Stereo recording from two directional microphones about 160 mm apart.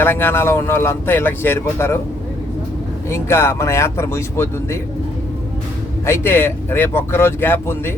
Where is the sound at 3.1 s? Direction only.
15° left (ahead or behind).